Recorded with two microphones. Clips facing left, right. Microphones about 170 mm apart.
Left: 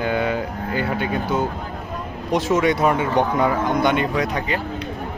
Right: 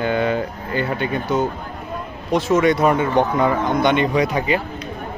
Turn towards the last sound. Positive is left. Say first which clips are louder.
# right 4 dB
turn(degrees=-5)  # may be behind; listen again after turning